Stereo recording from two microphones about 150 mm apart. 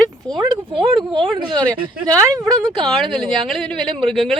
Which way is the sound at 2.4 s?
5° left (ahead or behind).